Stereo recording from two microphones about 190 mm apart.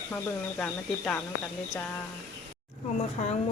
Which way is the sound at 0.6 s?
5° left (ahead or behind).